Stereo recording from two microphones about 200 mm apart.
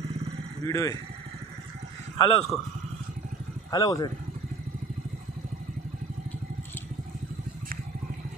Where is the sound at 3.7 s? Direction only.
20° left (ahead or behind).